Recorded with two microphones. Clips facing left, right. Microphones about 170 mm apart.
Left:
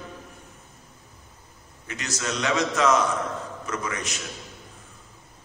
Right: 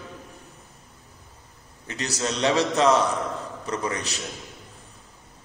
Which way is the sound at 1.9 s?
35° right (ahead or behind).